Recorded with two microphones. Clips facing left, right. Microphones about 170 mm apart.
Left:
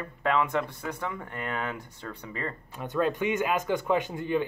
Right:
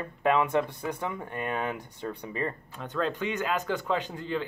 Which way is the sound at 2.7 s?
10° left (ahead or behind).